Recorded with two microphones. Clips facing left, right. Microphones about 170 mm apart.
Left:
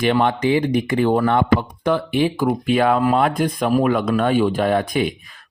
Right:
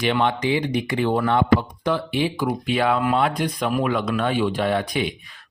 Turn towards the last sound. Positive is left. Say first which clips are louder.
# left 4 dB
turn(degrees=50)  # may be behind; listen again after turning